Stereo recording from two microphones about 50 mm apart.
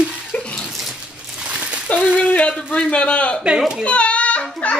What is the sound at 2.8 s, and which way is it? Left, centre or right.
Speech, left.